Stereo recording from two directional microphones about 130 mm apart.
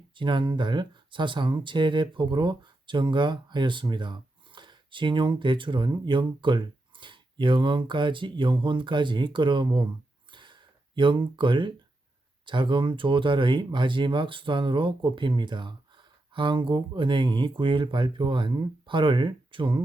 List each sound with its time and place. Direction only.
0.2 s speech: 40° right (ahead or behind)
10.3 s a sound: 40° right (ahead or behind)
12.5 s speech: 40° right (ahead or behind)